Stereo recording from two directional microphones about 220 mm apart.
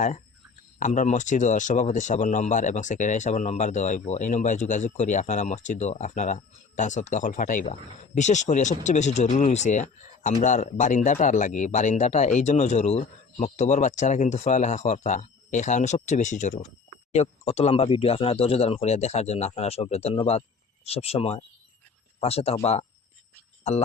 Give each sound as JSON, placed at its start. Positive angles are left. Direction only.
{"t": 0.8, "sound": "speech", "side_deg": 35}